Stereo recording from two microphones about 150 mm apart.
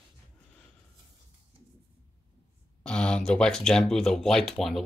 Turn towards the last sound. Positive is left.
turn(degrees=0)  # may be behind; listen again after turning